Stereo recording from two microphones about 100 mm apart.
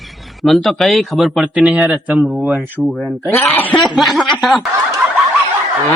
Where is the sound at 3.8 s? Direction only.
Centre (ahead or behind).